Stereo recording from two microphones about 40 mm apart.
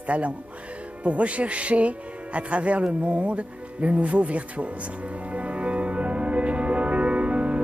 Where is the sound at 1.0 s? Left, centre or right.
Right.